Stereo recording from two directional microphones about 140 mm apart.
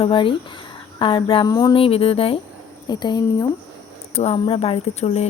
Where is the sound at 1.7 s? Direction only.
40° left (ahead or behind).